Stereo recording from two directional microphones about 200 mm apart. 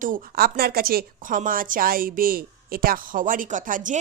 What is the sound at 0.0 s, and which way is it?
Speech, 45° right (ahead or behind).